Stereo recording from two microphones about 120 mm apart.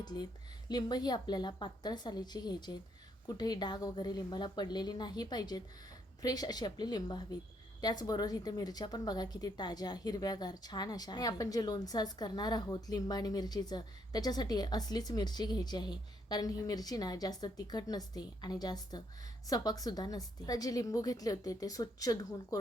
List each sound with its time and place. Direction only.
0.0 s a woman's voice: 35° left (ahead or behind)